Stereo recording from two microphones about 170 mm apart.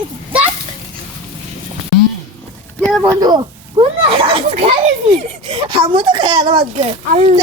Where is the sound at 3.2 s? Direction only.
25° right (ahead or behind).